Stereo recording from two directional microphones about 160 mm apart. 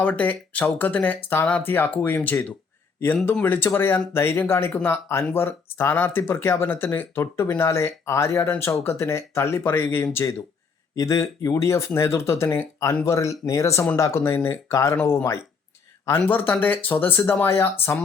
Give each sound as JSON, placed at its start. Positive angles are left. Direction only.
{"t": 0.0, "sound": "speech", "side_deg": 10}